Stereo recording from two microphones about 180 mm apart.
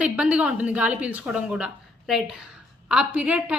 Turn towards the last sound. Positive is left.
turn(degrees=-5)  # may be behind; listen again after turning